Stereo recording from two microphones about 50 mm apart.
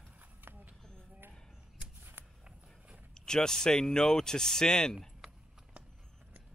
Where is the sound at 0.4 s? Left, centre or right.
Right.